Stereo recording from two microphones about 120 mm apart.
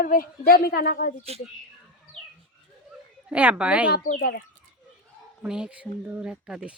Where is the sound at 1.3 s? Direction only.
60° right (ahead or behind).